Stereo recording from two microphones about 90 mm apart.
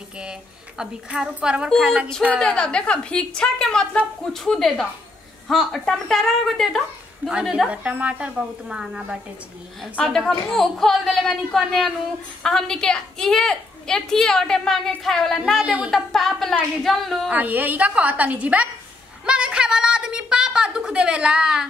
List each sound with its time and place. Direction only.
0.2 s a woman's voice: 10° right (ahead or behind)
2.3 s a woman's voice: 10° left (ahead or behind); by 9.2 s 10° right (ahead or behind)
10.0 s a woman's voice: 5° left (ahead or behind)
15.6 s a woman's voice: 15° right (ahead or behind)
15.9 s a woman's voice: 5° left (ahead or behind)
17.3 s a woman's voice: 20° right (ahead or behind)
19.2 s a sound: 10° right (ahead or behind)